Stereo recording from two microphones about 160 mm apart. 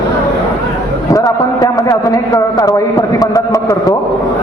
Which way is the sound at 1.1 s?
20° left (ahead or behind).